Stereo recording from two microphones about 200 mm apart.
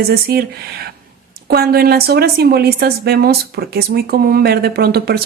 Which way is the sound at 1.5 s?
50° right (ahead or behind).